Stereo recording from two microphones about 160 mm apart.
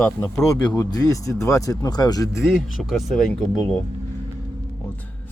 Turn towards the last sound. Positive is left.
turn(degrees=5)  # may be behind; listen again after turning